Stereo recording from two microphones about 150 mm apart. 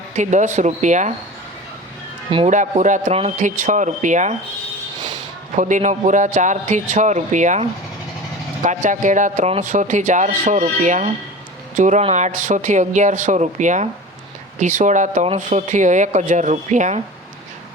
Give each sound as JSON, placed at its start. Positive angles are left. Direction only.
{"t": 0.2, "sound": "speech", "side_deg": -55}
{"t": 2.5, "sound": "speech", "side_deg": -55}
{"t": 5.5, "sound": "speech", "side_deg": -55}